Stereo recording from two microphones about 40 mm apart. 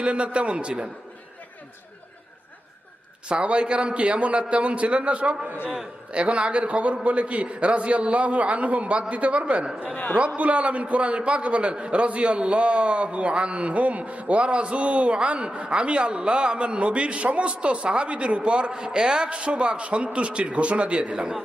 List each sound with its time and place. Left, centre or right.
0.0 s a man's voice: right
3.2 s a man's voice: right